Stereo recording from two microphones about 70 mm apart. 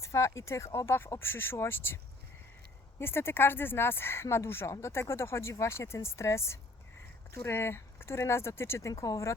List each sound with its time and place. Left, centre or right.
0.0 s speech: left
3.0 s speech: left
8.9 s speech: left